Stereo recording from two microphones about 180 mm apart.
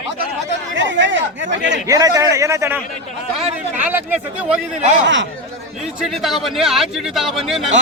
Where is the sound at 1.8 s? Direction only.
20° right (ahead or behind).